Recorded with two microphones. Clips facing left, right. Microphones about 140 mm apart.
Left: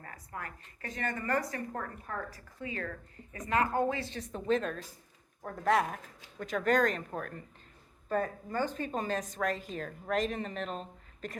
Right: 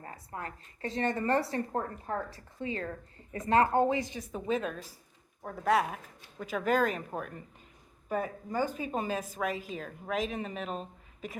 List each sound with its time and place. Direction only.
0.0 s a woman's voice: 25° right (ahead or behind); by 11.3 s 5° right (ahead or behind)